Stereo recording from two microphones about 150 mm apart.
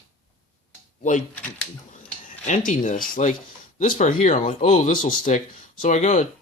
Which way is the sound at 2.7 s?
60° left (ahead or behind).